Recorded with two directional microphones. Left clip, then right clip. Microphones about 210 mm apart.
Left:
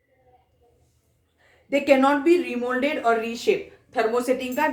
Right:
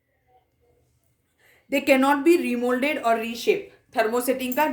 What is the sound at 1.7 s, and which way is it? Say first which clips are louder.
A woman's voice: left 1 dB; 45° right (ahead or behind).